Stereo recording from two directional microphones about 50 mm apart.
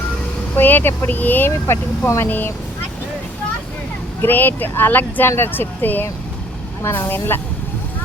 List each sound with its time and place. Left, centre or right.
0.5 s speech: left
1.5 s speech: left
2.2 s speech: left
4.2 s speech: left
6.8 s speech: left